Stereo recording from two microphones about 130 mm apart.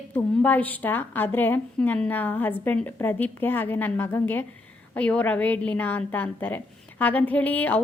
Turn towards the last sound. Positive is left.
turn(degrees=10)  # may be behind; listen again after turning